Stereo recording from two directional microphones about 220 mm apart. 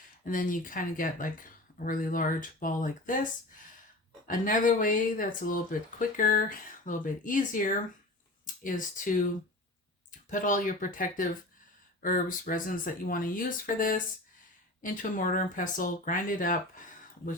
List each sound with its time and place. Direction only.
0.3 s speech: 40° left (ahead or behind)
8.6 s speech: 35° left (ahead or behind)